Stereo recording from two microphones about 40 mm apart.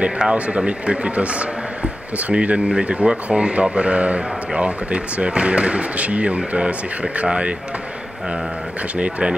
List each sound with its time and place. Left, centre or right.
0.0 s a man's voice: right
8.9 s a man's voice: right